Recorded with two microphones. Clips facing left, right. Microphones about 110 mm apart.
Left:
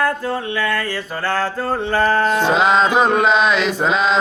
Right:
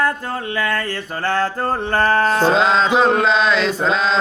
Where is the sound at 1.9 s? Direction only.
40° right (ahead or behind).